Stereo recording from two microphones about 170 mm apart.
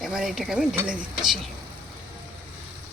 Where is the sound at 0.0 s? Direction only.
5° right (ahead or behind).